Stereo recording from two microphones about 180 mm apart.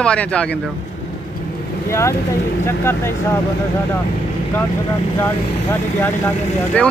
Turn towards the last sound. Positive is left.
turn(degrees=10)  # may be behind; listen again after turning